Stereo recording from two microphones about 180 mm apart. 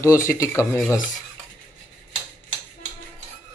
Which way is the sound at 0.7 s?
5° left (ahead or behind).